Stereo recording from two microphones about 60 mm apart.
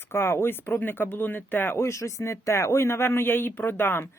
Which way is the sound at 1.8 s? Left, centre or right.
Left.